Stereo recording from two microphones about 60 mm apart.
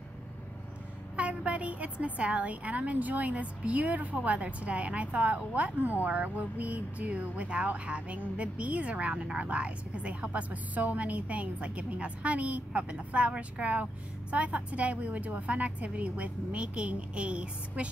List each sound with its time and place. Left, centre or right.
1.1 s a woman's voice: right